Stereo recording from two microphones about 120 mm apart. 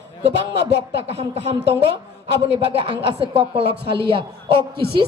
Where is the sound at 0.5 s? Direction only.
55° right (ahead or behind).